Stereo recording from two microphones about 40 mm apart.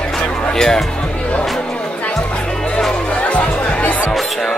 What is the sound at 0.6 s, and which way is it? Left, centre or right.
Speech, centre.